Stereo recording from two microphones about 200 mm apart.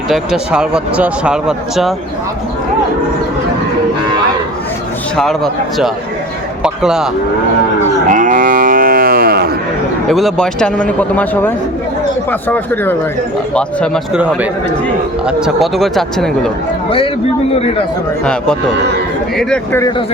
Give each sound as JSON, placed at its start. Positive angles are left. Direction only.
{"t": 0.1, "sound": "speech", "side_deg": -5}
{"t": 5.1, "sound": "speech", "side_deg": 0}
{"t": 8.0, "sound": "cattle", "side_deg": -40}
{"t": 10.1, "sound": "speech", "side_deg": 0}
{"t": 15.3, "sound": "speech", "side_deg": -5}
{"t": 19.4, "sound": "speech", "side_deg": 5}